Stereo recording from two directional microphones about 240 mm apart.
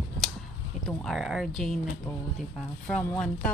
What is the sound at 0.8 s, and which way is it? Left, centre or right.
Speech, centre.